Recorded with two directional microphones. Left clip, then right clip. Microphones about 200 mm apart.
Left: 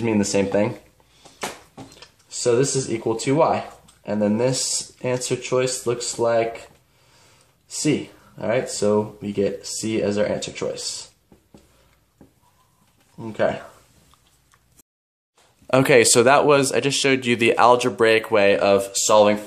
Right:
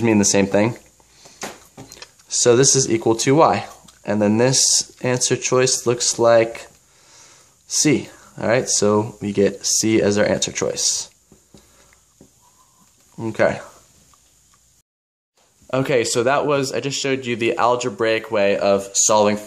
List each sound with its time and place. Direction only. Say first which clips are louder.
0.0 s speech: right 4 dB; 15° right (ahead or behind)
1.9 s speech: right 10 dB; 25° right (ahead or behind)
8.4 s speech: right 4 dB; 25° right (ahead or behind)
13.2 s speech: right 4 dB; 25° right (ahead or behind)
15.6 s speech: left 4 dB; 5° left (ahead or behind); by 19.3 s 15° right (ahead or behind)